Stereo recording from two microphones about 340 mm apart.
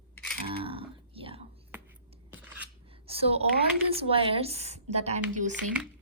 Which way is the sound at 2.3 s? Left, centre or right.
Centre.